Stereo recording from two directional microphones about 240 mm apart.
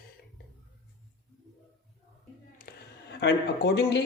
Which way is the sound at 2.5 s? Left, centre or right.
Left.